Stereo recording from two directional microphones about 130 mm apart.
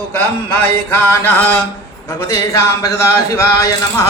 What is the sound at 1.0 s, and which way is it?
A man's voice, 15° left (ahead or behind).